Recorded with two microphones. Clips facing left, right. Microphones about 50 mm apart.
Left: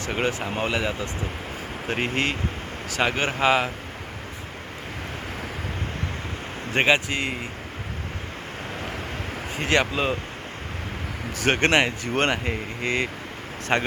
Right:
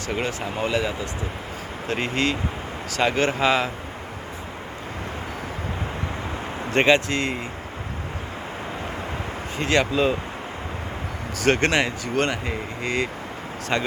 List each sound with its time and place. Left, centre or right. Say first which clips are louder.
0.1 s speech: left 1 dB; left
6.7 s speech: right 2 dB; centre
9.6 s speech: right 2 dB; left
11.3 s speech: even; left